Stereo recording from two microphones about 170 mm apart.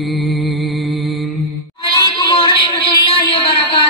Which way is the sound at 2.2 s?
30° left (ahead or behind).